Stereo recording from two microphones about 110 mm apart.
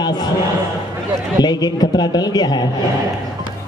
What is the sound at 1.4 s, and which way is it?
A man's voice, 40° left (ahead or behind).